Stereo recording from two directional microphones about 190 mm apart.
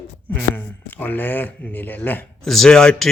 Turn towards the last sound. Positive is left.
turn(degrees=5)  # may be behind; listen again after turning